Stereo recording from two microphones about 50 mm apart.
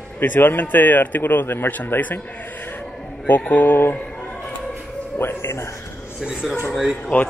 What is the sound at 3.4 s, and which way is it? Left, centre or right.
Speech, left.